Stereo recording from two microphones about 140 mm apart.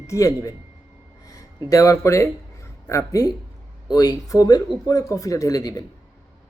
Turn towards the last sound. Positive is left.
turn(degrees=25)  # may be behind; listen again after turning